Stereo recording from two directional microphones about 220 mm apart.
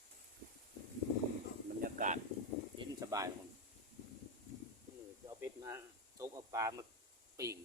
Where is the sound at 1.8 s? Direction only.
35° right (ahead or behind).